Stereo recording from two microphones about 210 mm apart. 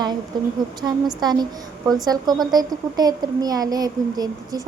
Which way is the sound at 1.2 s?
20° right (ahead or behind).